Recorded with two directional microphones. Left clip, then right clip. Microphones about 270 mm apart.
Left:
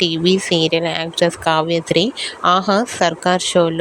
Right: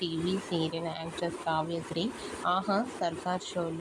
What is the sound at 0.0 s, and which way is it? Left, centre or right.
Speech, left.